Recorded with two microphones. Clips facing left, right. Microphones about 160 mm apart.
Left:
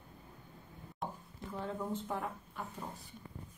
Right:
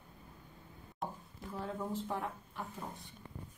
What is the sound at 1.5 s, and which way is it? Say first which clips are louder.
Speech: left 1 dB; centre (ahead or behind).